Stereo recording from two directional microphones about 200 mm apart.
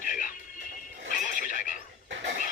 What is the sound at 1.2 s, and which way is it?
Neigh, 40° left (ahead or behind).